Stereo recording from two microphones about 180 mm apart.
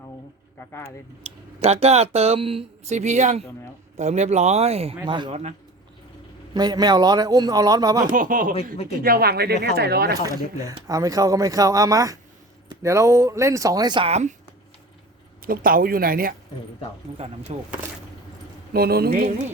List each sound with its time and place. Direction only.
0.7 s speech: 15° left (ahead or behind)
1.2 s a man's voice: 35° right (ahead or behind)
6.5 s a man's voice: 25° right (ahead or behind)
8.0 s speech: 50° right (ahead or behind)
10.6 s a man's voice: 20° right (ahead or behind)
14.1 s speech: 40° right (ahead or behind)
15.4 s speech: 55° right (ahead or behind)
17.5 s speech: 35° right (ahead or behind)
18.7 s speech: 60° right (ahead or behind)